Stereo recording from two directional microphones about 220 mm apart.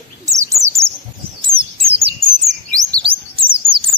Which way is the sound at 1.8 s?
25° right (ahead or behind).